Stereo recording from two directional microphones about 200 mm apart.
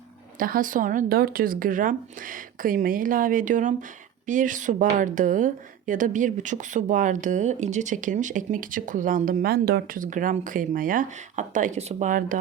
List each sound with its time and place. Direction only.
0.3 s speech: 45° right (ahead or behind)